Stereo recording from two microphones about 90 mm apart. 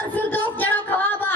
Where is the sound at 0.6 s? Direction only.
20° left (ahead or behind).